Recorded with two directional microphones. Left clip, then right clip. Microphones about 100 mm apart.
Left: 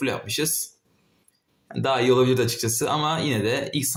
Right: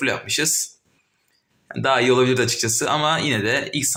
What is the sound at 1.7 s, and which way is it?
Speech, centre (ahead or behind).